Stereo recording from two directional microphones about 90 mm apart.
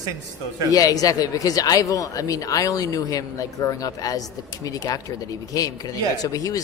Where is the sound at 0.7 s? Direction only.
40° left (ahead or behind).